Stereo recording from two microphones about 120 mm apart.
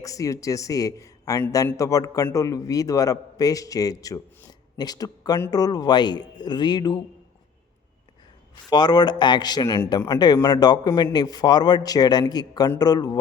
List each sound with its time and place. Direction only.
0.0 s a man's voice: 30° left (ahead or behind)
8.7 s a man's voice: 35° left (ahead or behind)